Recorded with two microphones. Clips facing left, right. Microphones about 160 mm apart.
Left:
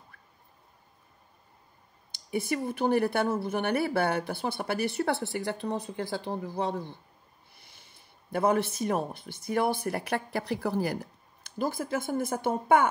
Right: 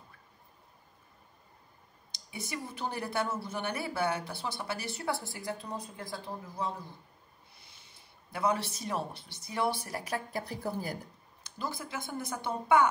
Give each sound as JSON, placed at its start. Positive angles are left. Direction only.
{"t": 2.3, "sound": "speech", "side_deg": 55}
{"t": 7.6, "sound": "speech", "side_deg": 55}
{"t": 11.4, "sound": "speech", "side_deg": 55}